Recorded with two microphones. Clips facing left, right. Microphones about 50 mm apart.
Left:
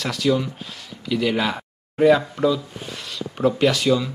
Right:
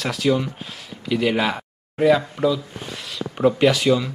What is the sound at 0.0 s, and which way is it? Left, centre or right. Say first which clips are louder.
Speech: even; centre.